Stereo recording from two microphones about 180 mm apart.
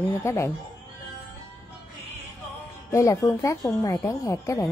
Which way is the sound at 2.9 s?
15° left (ahead or behind).